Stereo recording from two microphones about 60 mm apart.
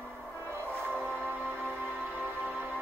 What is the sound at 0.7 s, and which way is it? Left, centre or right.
Music, right.